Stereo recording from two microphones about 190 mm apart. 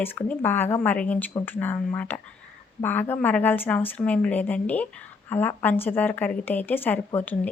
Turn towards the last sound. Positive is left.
turn(degrees=10)  # may be behind; listen again after turning